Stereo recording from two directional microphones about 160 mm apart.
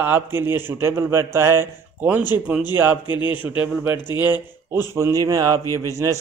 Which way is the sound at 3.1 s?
30° left (ahead or behind).